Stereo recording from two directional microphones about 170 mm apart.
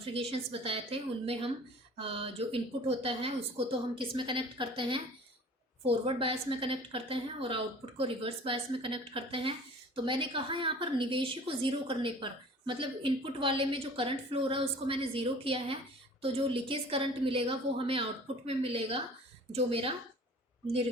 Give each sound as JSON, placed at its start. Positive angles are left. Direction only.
{"t": 0.0, "sound": "a woman's voice", "side_deg": -35}